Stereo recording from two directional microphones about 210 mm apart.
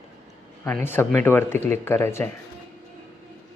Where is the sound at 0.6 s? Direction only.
10° left (ahead or behind).